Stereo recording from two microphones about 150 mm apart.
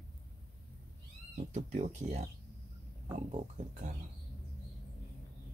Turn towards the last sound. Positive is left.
turn(degrees=-55)  # may be behind; listen again after turning